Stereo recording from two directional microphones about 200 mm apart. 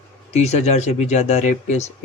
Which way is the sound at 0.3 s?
35° left (ahead or behind).